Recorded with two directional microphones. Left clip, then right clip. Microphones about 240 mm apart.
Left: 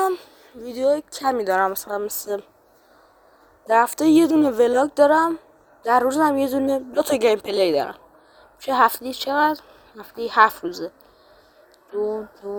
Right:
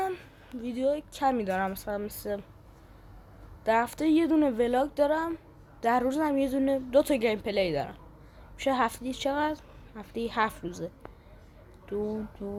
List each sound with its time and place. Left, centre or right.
0.0 s a sound: left
0.9 s a woman's voice: left
3.7 s a woman's voice: left
12.4 s a woman's voice: centre